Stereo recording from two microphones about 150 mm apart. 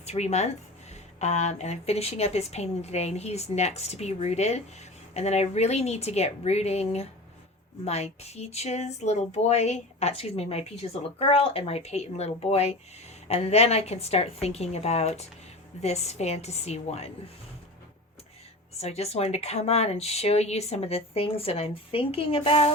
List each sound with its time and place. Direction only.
0.0 s speech: 45° left (ahead or behind)
18.8 s speech: 45° left (ahead or behind)